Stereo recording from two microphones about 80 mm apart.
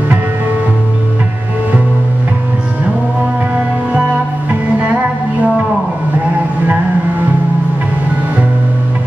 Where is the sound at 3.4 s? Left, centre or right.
Centre.